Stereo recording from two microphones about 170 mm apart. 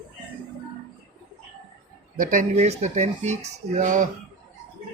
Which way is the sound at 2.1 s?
50° right (ahead or behind).